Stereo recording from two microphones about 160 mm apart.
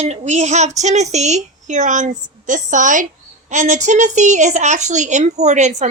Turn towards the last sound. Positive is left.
turn(degrees=-45)  # may be behind; listen again after turning